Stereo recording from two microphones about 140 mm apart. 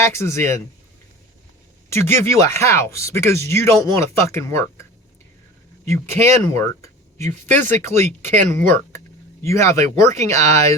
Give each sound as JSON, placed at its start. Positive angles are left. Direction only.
{"t": 0.0, "sound": "speech", "side_deg": 20}
{"t": 1.9, "sound": "speech", "side_deg": 15}